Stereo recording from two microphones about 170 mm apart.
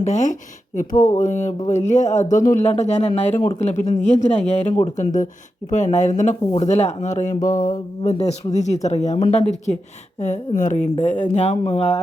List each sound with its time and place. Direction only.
0.0 s speech: 45° left (ahead or behind)